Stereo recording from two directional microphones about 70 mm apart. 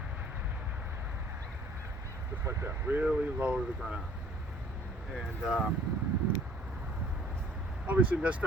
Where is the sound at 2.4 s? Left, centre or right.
Right.